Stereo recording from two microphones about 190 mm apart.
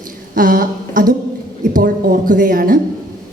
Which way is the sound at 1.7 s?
45° right (ahead or behind).